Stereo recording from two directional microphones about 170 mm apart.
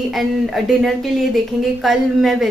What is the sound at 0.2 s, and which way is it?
A woman's voice, centre (ahead or behind).